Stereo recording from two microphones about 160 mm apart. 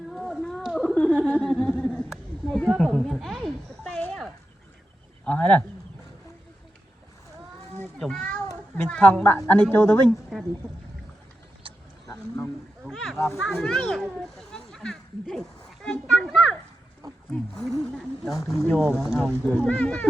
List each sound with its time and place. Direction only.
0.1 s a sound: centre (ahead or behind)
5.2 s speech: 10° left (ahead or behind)
7.9 s a child's voice: centre (ahead or behind)
11.6 s a sound: 35° right (ahead or behind)
12.8 s speech: centre (ahead or behind)
19.3 s speech: 10° left (ahead or behind)